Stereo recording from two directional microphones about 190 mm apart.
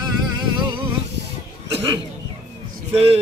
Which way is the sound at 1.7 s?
30° right (ahead or behind).